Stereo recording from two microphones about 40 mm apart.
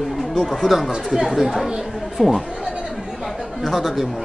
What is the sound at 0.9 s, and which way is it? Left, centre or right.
A man's voice, centre.